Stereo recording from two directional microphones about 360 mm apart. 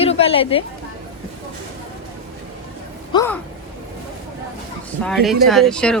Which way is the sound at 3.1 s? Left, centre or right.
Centre.